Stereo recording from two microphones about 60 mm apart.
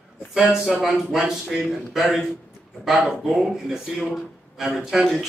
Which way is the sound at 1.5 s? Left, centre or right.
Centre.